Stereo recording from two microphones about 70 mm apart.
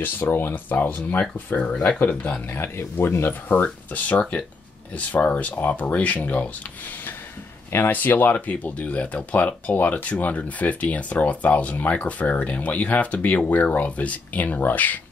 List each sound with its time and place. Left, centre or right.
0.0 s speech: left
2.4 s speech: left